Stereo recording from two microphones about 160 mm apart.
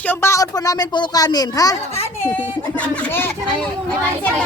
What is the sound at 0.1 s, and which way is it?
A woman's voice, 15° left (ahead or behind).